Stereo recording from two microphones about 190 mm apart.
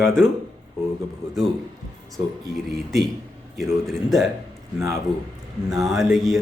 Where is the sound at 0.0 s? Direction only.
5° left (ahead or behind).